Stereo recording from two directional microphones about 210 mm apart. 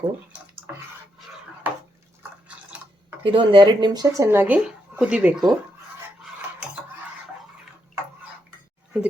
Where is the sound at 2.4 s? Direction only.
5° right (ahead or behind).